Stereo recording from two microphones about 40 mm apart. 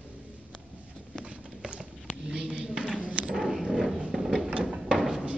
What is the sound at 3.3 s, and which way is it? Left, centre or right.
Dog, centre.